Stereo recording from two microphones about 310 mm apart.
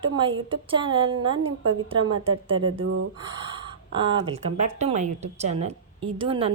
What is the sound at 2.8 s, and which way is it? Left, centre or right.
Speech, right.